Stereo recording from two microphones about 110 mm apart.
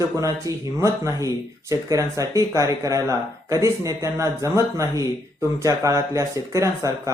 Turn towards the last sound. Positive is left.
turn(degrees=-30)  # may be behind; listen again after turning